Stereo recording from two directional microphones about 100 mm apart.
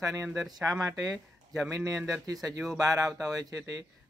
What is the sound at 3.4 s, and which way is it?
Speech, 35° right (ahead or behind).